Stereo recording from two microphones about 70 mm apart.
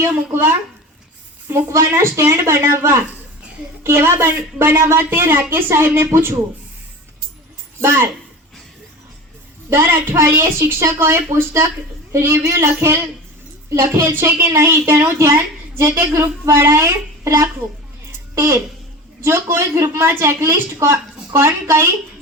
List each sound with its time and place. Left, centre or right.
0.3 s speech: right
7.8 s speech: right
9.6 s speech: right